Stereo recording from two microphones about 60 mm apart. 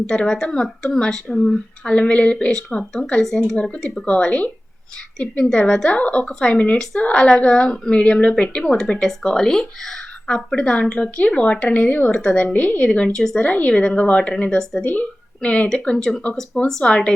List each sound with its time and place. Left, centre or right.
0.1 s a woman's voice: centre
1.8 s a woman's voice: centre
2.6 s a woman's voice: centre
5.5 s a woman's voice: centre
8.6 s a woman's voice: centre
10.5 s a woman's voice: centre
11.7 s speech: left
12.1 s a woman's voice: centre
12.5 s speech: left
12.8 s a woman's voice: centre
13.5 s a woman's voice: left
15.4 s a woman's voice: centre